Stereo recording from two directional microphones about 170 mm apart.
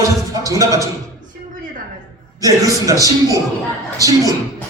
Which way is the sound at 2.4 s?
20° right (ahead or behind).